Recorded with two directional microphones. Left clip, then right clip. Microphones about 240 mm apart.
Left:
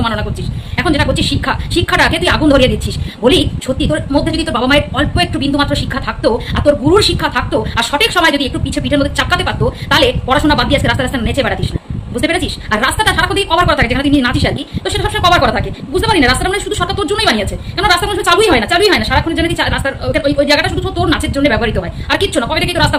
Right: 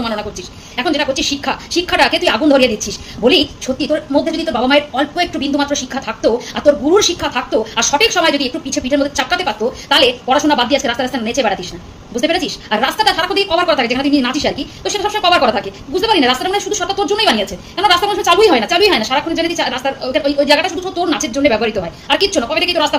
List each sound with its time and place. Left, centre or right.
0.0 s a woman's voice: centre